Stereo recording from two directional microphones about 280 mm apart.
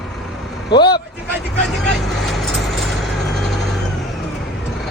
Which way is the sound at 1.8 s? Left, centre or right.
Centre.